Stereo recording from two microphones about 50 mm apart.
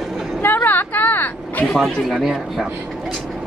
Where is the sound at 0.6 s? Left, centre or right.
Left.